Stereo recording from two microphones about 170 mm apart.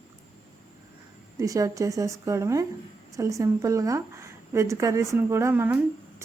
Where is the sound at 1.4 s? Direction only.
20° right (ahead or behind).